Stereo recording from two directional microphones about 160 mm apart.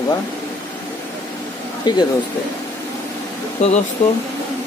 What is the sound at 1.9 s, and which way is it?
Speech, 25° left (ahead or behind).